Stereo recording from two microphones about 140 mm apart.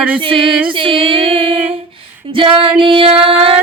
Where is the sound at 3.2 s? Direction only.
40° right (ahead or behind).